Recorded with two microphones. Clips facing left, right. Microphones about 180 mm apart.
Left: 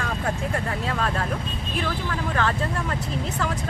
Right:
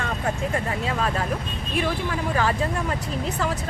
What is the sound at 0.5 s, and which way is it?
Speech, 5° right (ahead or behind).